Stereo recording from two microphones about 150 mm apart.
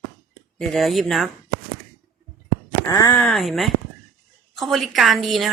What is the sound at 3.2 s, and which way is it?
A woman's voice, centre (ahead or behind).